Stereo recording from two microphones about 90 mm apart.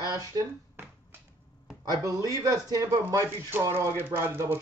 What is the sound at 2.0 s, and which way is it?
Speech, 40° right (ahead or behind).